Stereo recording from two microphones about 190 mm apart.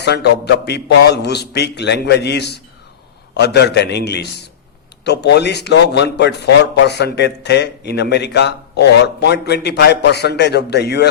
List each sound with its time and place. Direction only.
0.0 s a man's voice: 60° left (ahead or behind)